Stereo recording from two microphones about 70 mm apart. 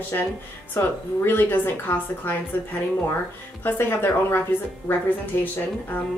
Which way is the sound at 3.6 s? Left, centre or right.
Left.